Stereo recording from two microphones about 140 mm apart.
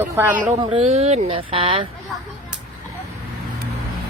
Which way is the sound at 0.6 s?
45° right (ahead or behind).